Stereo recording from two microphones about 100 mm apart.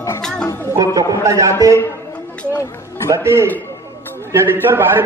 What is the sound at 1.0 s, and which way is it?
Speech, 35° right (ahead or behind).